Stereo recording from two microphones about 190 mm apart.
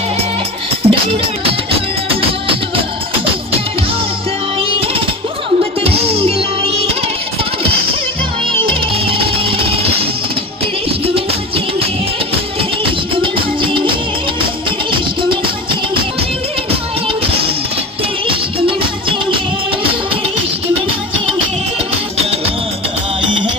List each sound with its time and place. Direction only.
0.8 s music: 30° right (ahead or behind)
5.8 s music: 30° right (ahead or behind)
8.5 s music: 30° right (ahead or behind)
18.2 s music: 30° right (ahead or behind)